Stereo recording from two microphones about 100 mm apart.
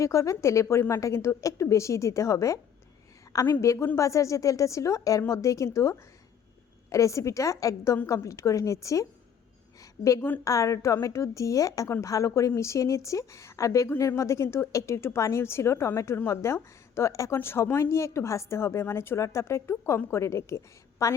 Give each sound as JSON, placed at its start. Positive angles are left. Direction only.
{"t": 0.0, "sound": "a woman's voice", "side_deg": 30}
{"t": 9.8, "sound": "a sound", "side_deg": 35}
{"t": 10.4, "sound": "a woman's voice", "side_deg": 35}